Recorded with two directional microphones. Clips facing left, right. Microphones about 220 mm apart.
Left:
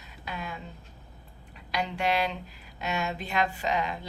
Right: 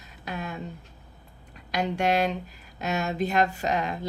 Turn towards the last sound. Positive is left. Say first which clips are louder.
# right 2 dB
turn(degrees=-45)  # may be behind; listen again after turning